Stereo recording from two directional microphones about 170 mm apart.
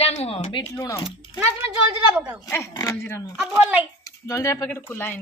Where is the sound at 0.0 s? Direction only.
40° left (ahead or behind).